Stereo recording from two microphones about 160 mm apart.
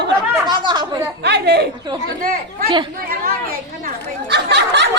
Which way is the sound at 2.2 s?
70° right (ahead or behind).